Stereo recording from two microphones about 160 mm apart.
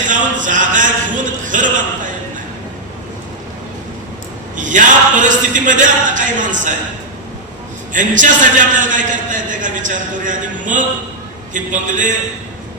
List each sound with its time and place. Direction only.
0.1 s a man's voice: 55° right (ahead or behind)
4.5 s a man's voice: 55° right (ahead or behind)
7.9 s a man's voice: 55° right (ahead or behind)